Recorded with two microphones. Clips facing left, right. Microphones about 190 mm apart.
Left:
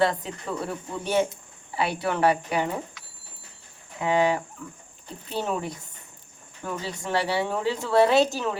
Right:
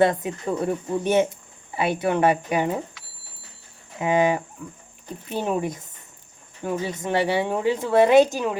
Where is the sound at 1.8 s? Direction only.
20° right (ahead or behind).